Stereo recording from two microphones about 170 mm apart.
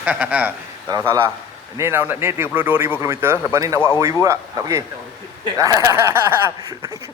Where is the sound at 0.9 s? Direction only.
20° right (ahead or behind).